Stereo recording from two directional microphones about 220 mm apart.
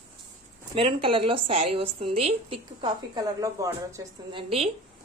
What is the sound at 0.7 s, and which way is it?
A woman's voice, 25° right (ahead or behind).